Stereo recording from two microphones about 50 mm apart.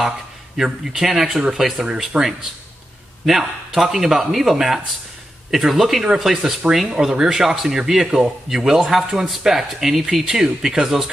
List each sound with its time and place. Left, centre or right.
0.6 s speech: centre
2.1 s speech: right
3.3 s speech: centre